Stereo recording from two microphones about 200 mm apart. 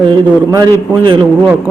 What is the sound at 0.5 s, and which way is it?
Speech, 20° right (ahead or behind).